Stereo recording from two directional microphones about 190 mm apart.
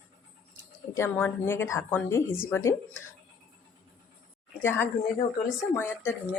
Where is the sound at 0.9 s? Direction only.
10° left (ahead or behind).